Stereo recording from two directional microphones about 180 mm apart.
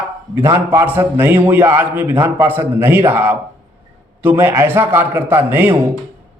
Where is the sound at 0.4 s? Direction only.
15° right (ahead or behind).